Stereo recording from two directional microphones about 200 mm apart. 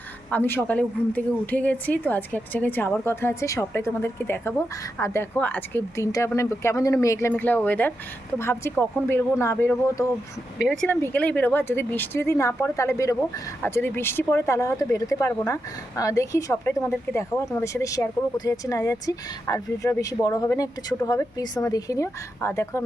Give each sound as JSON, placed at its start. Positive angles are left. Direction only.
{"t": 0.3, "sound": "speech", "side_deg": 10}